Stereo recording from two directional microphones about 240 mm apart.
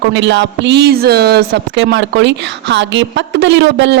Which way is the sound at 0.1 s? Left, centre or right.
Right.